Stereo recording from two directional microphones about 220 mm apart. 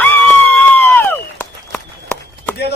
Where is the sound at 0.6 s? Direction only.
10° left (ahead or behind).